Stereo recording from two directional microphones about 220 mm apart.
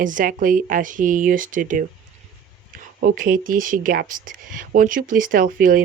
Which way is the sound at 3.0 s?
40° right (ahead or behind).